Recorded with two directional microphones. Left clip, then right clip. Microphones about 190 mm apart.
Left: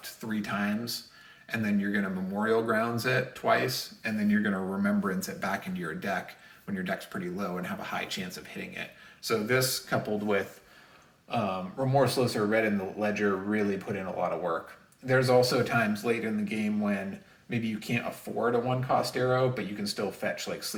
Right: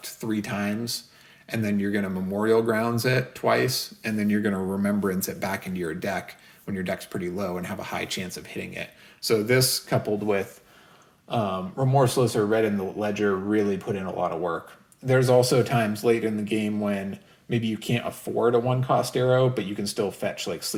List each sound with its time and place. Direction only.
0.0 s speech: 40° right (ahead or behind)
11.3 s speech: 30° right (ahead or behind)